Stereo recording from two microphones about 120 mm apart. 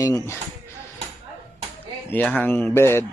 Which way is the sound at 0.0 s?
25° left (ahead or behind).